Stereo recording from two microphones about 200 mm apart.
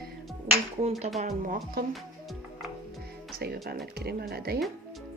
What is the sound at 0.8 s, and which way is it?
Speech, 30° right (ahead or behind).